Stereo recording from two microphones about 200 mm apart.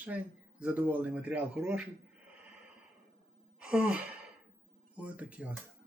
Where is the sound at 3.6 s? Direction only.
5° right (ahead or behind).